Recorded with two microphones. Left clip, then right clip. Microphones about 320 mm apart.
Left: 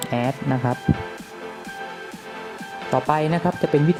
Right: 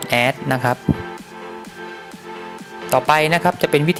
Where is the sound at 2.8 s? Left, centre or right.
Right.